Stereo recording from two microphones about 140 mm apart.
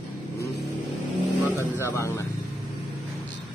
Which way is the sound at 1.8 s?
20° left (ahead or behind).